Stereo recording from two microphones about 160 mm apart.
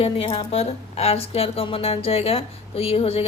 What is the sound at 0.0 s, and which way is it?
A woman's voice, 35° left (ahead or behind).